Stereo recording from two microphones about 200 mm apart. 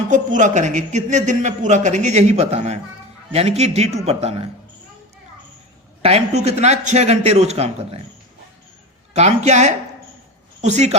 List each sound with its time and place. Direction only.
0.1 s a man's voice: 40° right (ahead or behind)
6.0 s a man's voice: 30° right (ahead or behind)
9.1 s a man's voice: 35° right (ahead or behind)